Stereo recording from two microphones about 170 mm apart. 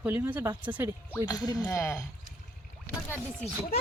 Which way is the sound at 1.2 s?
25° left (ahead or behind).